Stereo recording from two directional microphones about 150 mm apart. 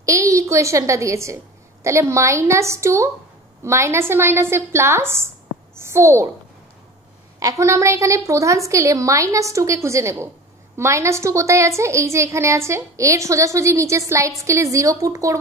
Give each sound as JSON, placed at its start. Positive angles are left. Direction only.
{"t": 0.0, "sound": "a woman's voice", "side_deg": -20}
{"t": 7.3, "sound": "a woman's voice", "side_deg": -20}